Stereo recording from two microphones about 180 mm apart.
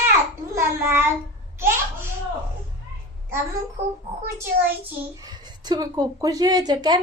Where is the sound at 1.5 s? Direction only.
15° right (ahead or behind).